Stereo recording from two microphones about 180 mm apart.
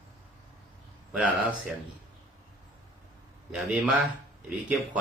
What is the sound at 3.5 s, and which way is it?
Speech, 5° right (ahead or behind).